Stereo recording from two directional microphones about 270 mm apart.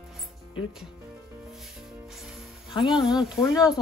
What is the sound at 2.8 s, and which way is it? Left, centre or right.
Speech, centre.